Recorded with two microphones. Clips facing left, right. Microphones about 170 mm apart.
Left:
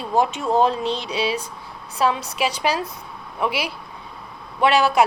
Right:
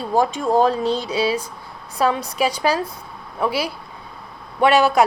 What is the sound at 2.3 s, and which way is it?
Speech, 40° right (ahead or behind).